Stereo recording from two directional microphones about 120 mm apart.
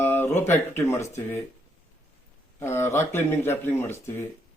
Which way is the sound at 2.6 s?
20° left (ahead or behind).